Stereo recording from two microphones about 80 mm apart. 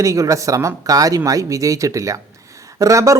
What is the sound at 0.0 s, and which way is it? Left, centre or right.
Speech, right.